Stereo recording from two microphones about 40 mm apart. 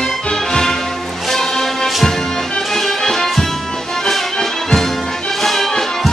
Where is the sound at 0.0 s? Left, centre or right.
Centre.